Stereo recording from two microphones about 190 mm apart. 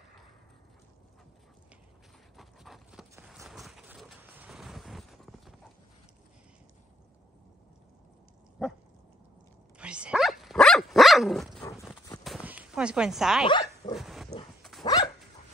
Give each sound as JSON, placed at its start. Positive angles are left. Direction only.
{"t": 2.3, "sound": "dog", "side_deg": 0}
{"t": 3.4, "sound": "vehicle", "side_deg": 0}
{"t": 8.6, "sound": "dog", "side_deg": -5}
{"t": 9.8, "sound": "dog", "side_deg": -5}
{"t": 12.2, "sound": "a sound", "side_deg": -5}
{"t": 13.5, "sound": "dog", "side_deg": 25}
{"t": 13.9, "sound": "pig", "side_deg": 0}
{"t": 14.8, "sound": "dog", "side_deg": 20}